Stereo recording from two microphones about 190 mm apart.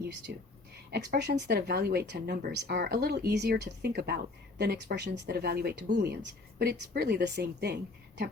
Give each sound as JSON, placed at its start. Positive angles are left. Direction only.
{"t": 0.3, "sound": "speech", "side_deg": -55}